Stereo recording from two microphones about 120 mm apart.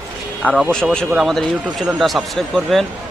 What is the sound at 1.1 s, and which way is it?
Speech, centre (ahead or behind).